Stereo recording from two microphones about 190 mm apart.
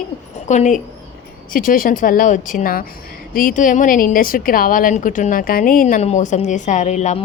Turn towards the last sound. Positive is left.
turn(degrees=40)  # may be behind; listen again after turning